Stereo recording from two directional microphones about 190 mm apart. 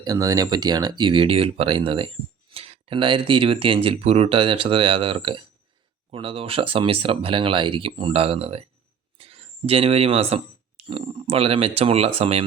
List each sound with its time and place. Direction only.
0.0 s speech: 20° right (ahead or behind)